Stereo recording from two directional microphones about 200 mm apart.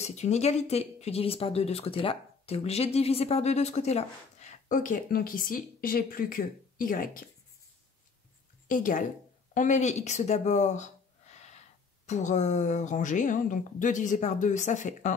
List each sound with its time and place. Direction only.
0.0 s speech: 35° left (ahead or behind)
8.6 s a woman's voice: 40° left (ahead or behind)